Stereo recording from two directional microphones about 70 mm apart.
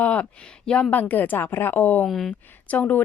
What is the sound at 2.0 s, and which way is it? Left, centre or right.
Speech, centre.